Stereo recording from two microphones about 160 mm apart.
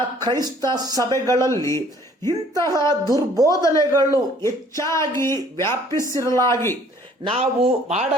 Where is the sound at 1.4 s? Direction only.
20° left (ahead or behind).